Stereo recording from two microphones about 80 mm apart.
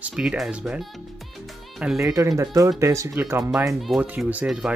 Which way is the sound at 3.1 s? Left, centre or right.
Right.